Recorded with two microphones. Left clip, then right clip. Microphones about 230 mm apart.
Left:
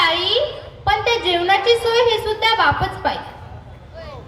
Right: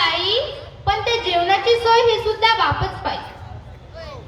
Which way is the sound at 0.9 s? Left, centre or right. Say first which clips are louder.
Left 2 dB; left.